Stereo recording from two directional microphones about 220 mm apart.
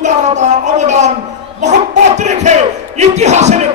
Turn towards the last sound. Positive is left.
turn(degrees=-30)  # may be behind; listen again after turning